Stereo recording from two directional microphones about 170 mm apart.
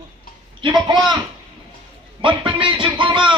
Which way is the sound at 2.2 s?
30° right (ahead or behind).